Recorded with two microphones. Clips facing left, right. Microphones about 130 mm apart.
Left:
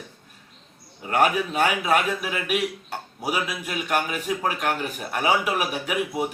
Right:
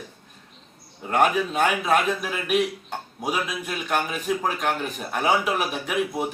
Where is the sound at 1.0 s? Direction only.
10° left (ahead or behind).